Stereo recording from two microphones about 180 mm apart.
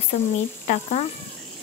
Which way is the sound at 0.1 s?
45° left (ahead or behind).